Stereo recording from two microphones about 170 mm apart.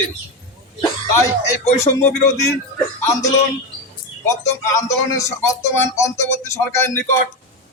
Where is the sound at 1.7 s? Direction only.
40° left (ahead or behind).